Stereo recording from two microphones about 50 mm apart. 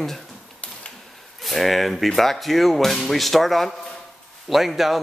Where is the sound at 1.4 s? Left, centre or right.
Centre.